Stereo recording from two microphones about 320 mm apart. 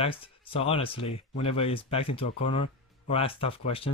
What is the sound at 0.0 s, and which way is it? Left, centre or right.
Speech, centre.